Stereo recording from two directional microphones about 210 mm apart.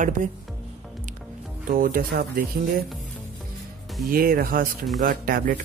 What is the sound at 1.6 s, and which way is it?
Speech, 40° right (ahead or behind).